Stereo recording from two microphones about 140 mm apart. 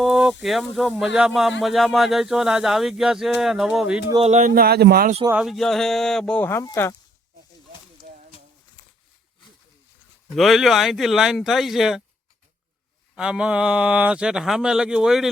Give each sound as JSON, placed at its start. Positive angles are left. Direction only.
{"t": 0.0, "sound": "a sound", "side_deg": -5}
{"t": 0.4, "sound": "speech", "side_deg": 0}
{"t": 4.2, "sound": "speech", "side_deg": -55}
{"t": 5.3, "sound": "speech", "side_deg": -5}
{"t": 10.3, "sound": "speech", "side_deg": 0}
{"t": 13.1, "sound": "speech", "side_deg": -5}